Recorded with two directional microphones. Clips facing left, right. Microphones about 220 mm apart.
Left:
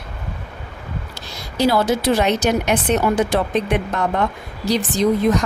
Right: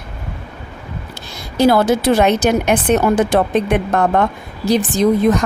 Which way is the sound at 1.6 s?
50° right (ahead or behind).